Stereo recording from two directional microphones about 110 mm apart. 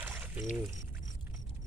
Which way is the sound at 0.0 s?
15° right (ahead or behind).